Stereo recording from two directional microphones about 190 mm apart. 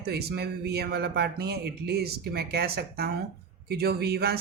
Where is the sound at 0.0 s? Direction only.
55° right (ahead or behind).